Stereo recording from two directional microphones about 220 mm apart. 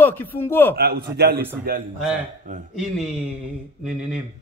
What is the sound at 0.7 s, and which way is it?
Speech, 45° right (ahead or behind).